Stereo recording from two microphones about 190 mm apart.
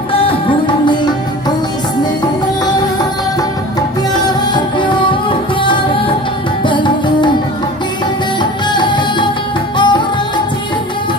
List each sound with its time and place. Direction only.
0.3 s music: 25° left (ahead or behind)
4.1 s music: 25° left (ahead or behind)
8.4 s music: 25° left (ahead or behind)